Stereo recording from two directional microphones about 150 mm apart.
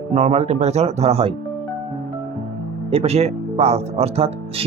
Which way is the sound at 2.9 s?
45° right (ahead or behind).